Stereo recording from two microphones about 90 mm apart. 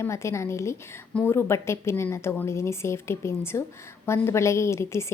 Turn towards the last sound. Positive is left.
turn(degrees=30)  # may be behind; listen again after turning